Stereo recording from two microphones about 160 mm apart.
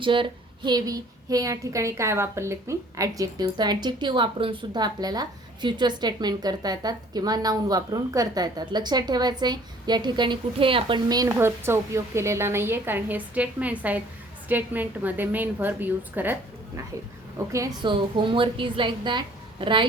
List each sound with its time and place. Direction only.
0.0 s a woman's voice: 30° right (ahead or behind)
11.3 s a woman's voice: 15° right (ahead or behind)
17.8 s a woman's voice: 30° right (ahead or behind)